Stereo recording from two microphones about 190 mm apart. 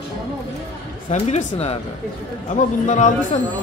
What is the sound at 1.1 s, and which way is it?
Speech, 40° left (ahead or behind).